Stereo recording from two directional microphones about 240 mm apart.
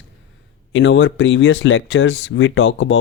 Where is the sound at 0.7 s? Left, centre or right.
Left.